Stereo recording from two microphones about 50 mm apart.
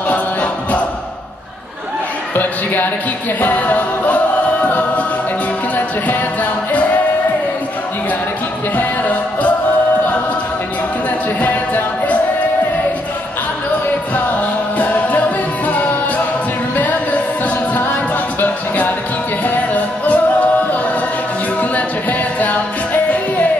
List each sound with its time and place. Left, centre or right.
0.1 s music: left
2.3 s a sound: left
3.3 s music: left
8.7 s music: left
11.4 s music: left
14.8 s music: left
19.4 s music: left